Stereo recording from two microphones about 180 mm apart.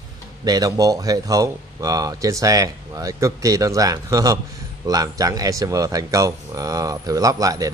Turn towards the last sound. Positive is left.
turn(degrees=-20)  # may be behind; listen again after turning